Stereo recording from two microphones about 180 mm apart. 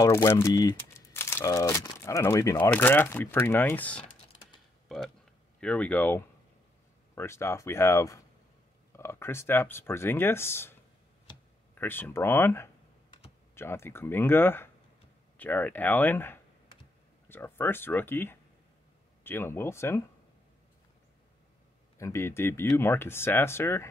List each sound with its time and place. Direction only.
0.0 s speech: 15° left (ahead or behind)
4.8 s a sound: centre (ahead or behind)
5.6 s speech: 5° left (ahead or behind)
21.9 s speech: 15° left (ahead or behind)